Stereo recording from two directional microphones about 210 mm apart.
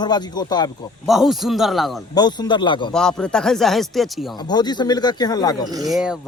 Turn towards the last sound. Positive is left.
turn(degrees=-5)  # may be behind; listen again after turning